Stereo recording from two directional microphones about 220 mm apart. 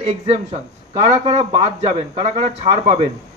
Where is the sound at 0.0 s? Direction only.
25° right (ahead or behind).